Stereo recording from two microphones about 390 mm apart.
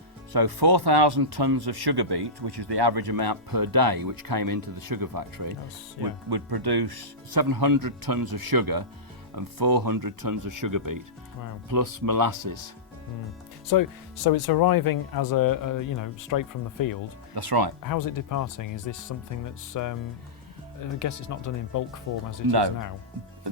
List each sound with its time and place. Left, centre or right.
0.3 s speech: right
6.3 s speech: right
13.7 s speech: left
14.3 s speech: left
17.3 s speech: right
17.8 s speech: left